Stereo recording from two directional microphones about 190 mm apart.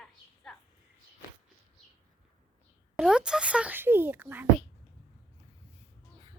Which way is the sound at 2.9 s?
5° right (ahead or behind).